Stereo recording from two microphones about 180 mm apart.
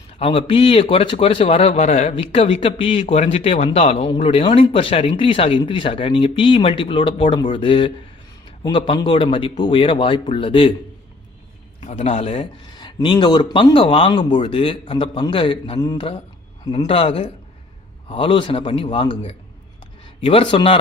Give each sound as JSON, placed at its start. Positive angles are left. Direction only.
{"t": 0.2, "sound": "a man's voice", "side_deg": 30}
{"t": 11.8, "sound": "speech", "side_deg": 35}